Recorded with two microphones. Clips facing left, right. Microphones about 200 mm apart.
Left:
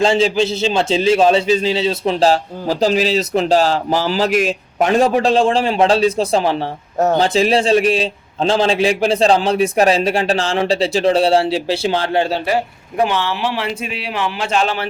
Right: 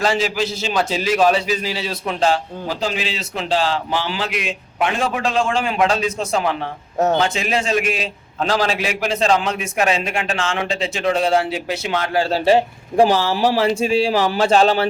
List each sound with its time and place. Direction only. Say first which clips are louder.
0.0 s a man's voice: left 5 dB; 25° left (ahead or behind)
12.5 s a man's voice: right 4 dB; 30° right (ahead or behind)